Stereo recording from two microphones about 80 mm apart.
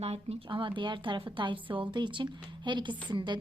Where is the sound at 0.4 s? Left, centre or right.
Right.